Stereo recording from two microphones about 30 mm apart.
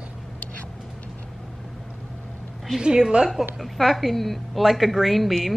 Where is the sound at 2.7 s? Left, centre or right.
Right.